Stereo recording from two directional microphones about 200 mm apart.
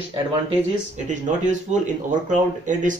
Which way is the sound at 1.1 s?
35° right (ahead or behind).